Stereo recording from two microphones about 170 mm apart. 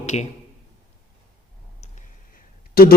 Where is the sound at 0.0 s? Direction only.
40° left (ahead or behind).